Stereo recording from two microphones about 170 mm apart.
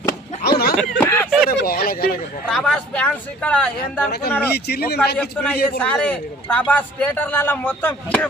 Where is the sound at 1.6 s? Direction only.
60° left (ahead or behind).